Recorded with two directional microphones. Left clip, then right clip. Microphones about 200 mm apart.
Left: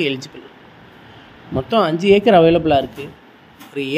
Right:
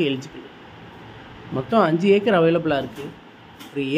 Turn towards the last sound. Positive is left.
turn(degrees=20)  # may be behind; listen again after turning